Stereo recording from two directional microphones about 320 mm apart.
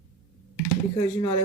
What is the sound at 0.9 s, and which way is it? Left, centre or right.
Speech, centre.